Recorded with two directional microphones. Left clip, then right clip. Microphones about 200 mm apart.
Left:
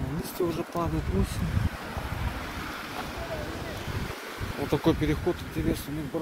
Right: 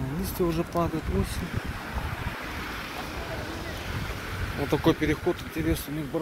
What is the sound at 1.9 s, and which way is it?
Waves, 60° left (ahead or behind).